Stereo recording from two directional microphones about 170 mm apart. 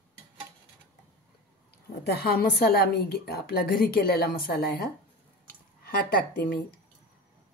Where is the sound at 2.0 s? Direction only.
70° left (ahead or behind).